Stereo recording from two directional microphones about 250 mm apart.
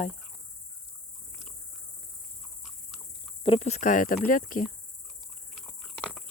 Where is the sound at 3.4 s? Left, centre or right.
Left.